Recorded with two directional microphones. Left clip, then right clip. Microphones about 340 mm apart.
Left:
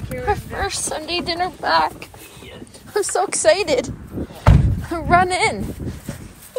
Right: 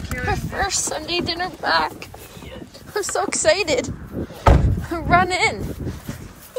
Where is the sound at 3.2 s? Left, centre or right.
Centre.